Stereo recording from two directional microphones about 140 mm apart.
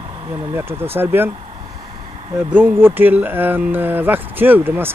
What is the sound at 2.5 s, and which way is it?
Speech, 15° right (ahead or behind).